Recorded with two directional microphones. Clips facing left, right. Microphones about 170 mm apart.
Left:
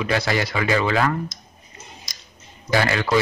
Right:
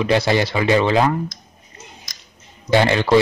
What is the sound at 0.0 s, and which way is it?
Speech, 25° right (ahead or behind).